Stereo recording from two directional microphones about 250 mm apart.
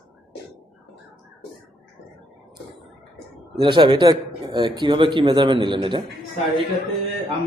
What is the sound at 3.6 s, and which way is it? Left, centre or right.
A man's voice, centre.